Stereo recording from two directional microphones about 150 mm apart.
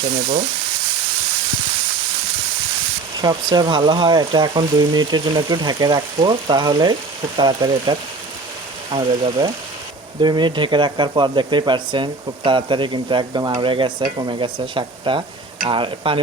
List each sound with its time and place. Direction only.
3.2 s speech: 25° right (ahead or behind)